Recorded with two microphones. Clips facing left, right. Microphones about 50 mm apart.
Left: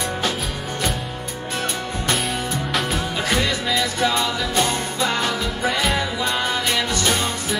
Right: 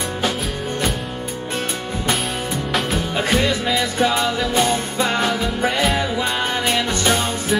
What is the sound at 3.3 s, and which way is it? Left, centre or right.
Music, centre.